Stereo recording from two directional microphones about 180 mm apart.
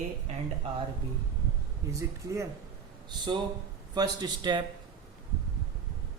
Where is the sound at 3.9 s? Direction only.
25° right (ahead or behind).